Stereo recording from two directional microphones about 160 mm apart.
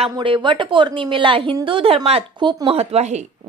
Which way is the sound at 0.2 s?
30° right (ahead or behind).